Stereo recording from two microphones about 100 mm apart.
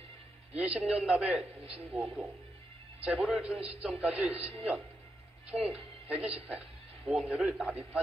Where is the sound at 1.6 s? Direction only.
Centre (ahead or behind).